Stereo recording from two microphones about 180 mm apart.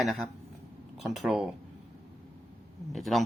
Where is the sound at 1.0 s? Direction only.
Centre (ahead or behind).